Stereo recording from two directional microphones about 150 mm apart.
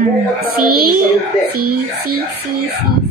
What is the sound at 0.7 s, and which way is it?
Speech, 85° right.